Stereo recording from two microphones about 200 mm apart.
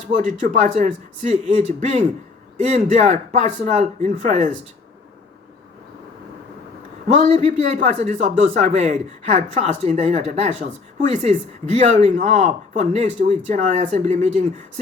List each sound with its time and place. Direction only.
0.3 s a man's voice: 35° right (ahead or behind)
7.1 s a man's voice: 35° right (ahead or behind)